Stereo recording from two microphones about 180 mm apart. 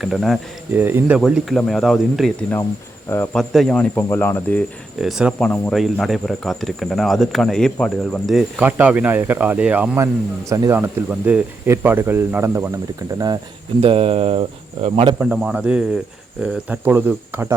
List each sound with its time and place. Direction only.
0.0 s speech: centre (ahead or behind)
0.7 s speech: 10° right (ahead or behind)
3.1 s speech: 10° left (ahead or behind)
4.9 s speech: centre (ahead or behind); by 13.4 s 20° right (ahead or behind)
13.8 s speech: 35° right (ahead or behind)
15.2 s speech: 5° right (ahead or behind)